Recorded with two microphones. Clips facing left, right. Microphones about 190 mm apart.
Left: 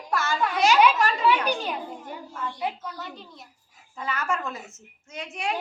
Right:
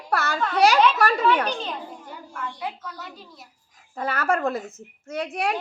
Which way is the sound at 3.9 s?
55° right (ahead or behind).